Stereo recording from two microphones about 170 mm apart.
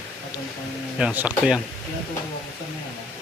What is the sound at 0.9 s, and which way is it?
Speech, 10° right (ahead or behind).